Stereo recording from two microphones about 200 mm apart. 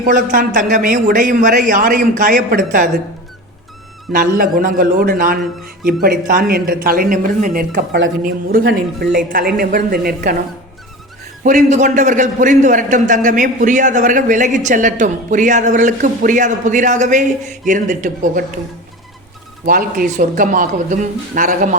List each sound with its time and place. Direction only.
0.0 s a man's voice: 45° right (ahead or behind)
4.1 s a man's voice: 45° right (ahead or behind)
11.4 s a man's voice: 40° right (ahead or behind)
19.6 s a man's voice: 45° right (ahead or behind)